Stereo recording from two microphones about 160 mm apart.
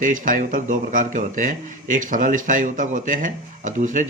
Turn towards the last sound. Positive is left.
turn(degrees=-50)  # may be behind; listen again after turning